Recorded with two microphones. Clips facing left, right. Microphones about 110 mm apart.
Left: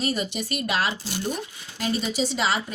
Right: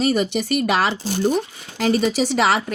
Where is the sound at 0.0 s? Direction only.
70° right (ahead or behind).